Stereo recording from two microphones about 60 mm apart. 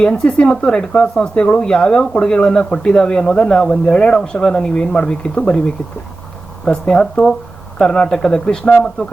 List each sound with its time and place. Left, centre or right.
0.0 s speech: centre
6.7 s speech: centre